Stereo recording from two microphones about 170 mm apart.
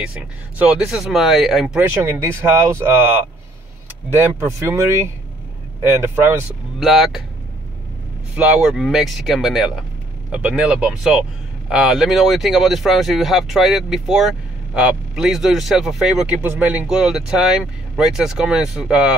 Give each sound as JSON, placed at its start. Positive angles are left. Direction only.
{"t": 0.0, "sound": "speech", "side_deg": -5}
{"t": 2.1, "sound": "speech", "side_deg": -15}
{"t": 4.1, "sound": "speech", "side_deg": -15}
{"t": 6.8, "sound": "speech", "side_deg": 0}
{"t": 8.4, "sound": "speech", "side_deg": -5}